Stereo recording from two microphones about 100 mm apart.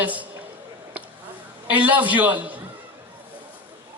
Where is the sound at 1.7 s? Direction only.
15° right (ahead or behind).